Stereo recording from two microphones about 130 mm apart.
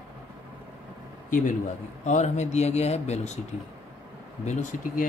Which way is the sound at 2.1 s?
60° left (ahead or behind).